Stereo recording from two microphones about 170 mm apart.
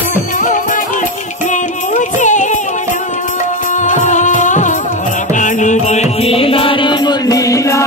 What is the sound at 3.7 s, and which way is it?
Music, 45° left (ahead or behind).